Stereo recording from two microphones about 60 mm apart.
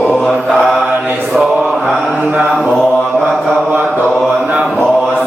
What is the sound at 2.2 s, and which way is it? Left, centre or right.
Mantra, centre.